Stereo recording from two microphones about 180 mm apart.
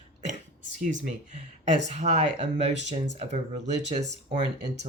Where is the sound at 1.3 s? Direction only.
40° right (ahead or behind).